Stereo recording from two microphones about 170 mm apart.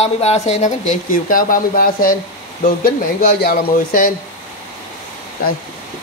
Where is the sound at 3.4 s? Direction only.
60° left (ahead or behind).